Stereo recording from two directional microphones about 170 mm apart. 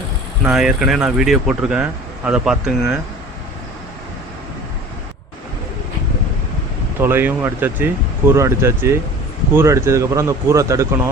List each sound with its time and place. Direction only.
0.4 s speech: 5° right (ahead or behind)
7.0 s speech: 10° right (ahead or behind)